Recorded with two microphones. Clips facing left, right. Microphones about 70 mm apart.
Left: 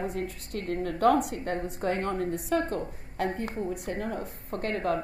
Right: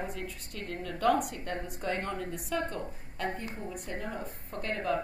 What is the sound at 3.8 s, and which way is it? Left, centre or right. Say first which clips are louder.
A woman's voice: left 5 dB; left.